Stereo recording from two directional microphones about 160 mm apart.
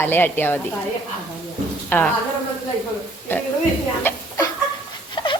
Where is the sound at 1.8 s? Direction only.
10° left (ahead or behind).